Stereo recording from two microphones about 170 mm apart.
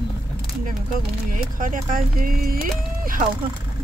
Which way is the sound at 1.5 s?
50° right (ahead or behind).